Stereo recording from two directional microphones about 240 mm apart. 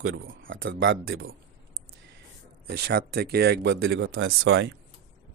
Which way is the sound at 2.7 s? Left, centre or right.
Right.